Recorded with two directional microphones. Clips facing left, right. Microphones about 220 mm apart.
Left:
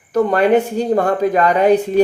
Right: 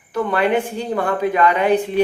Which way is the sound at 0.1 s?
40° left (ahead or behind).